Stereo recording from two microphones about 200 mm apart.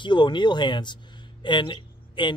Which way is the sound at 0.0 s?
20° left (ahead or behind).